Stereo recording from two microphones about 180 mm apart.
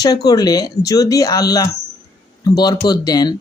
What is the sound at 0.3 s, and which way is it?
Speech, 20° left (ahead or behind).